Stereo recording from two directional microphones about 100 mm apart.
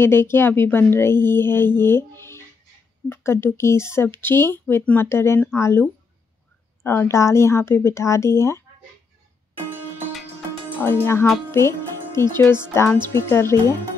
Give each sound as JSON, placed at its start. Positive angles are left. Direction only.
{"t": 0.0, "sound": "speech", "side_deg": 25}
{"t": 11.5, "sound": "speech", "side_deg": 25}